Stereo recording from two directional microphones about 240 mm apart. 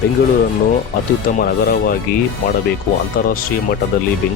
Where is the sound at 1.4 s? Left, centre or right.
Left.